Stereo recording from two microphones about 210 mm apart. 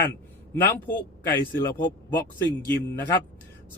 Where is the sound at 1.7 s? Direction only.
45° left (ahead or behind).